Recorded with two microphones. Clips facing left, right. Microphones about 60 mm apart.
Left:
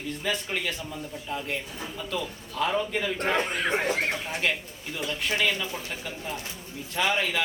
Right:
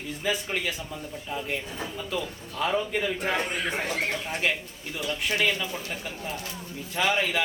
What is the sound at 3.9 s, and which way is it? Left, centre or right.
Speech, left.